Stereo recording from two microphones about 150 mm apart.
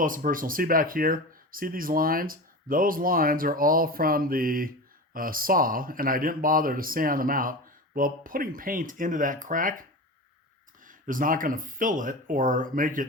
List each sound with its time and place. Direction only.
0.0 s speech: 65° right (ahead or behind)
10.8 s speech: 65° right (ahead or behind)